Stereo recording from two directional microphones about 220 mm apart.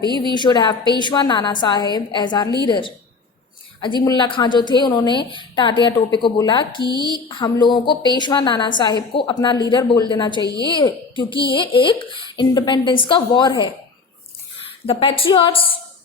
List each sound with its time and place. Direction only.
0.3 s a woman's voice: 20° left (ahead or behind)
6.8 s a woman's voice: 20° right (ahead or behind)
7.1 s a woman's voice: 20° left (ahead or behind)
14.8 s a woman's voice: 25° left (ahead or behind)